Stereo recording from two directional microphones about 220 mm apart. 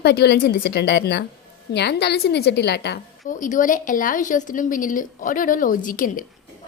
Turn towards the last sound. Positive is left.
turn(degrees=40)  # may be behind; listen again after turning